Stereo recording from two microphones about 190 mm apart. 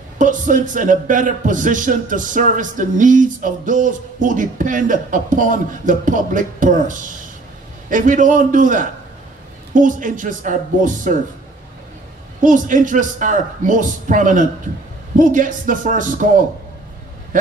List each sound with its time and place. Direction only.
0.2 s a man's voice: 40° right (ahead or behind)
12.4 s a man's voice: 45° right (ahead or behind)